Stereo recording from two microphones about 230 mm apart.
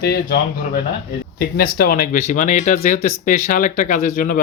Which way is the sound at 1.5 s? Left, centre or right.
Left.